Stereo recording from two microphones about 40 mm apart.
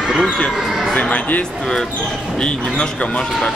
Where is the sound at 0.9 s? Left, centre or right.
Left.